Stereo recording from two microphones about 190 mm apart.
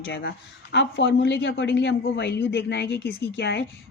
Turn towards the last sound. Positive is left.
turn(degrees=65)  # may be behind; listen again after turning